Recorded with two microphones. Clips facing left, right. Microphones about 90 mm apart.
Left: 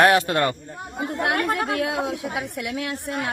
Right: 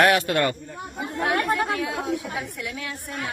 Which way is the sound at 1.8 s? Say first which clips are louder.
Left 2 dB; 70° left (ahead or behind).